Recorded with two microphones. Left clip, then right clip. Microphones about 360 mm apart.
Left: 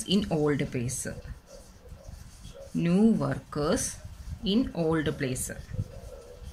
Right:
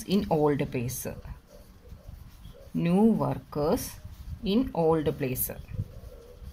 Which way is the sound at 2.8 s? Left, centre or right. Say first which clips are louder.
Right 1 dB; centre.